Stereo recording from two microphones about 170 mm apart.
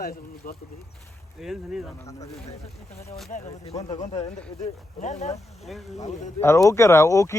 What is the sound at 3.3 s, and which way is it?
Speech, 45° left (ahead or behind).